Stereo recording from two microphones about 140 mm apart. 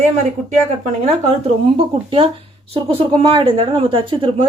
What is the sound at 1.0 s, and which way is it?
Speech, 50° right (ahead or behind).